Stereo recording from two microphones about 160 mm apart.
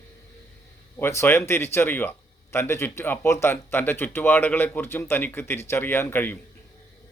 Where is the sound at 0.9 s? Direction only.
15° left (ahead or behind).